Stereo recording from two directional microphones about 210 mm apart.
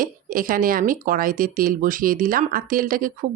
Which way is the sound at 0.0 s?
40° right (ahead or behind).